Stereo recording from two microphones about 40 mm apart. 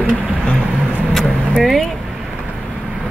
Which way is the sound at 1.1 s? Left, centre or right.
Centre.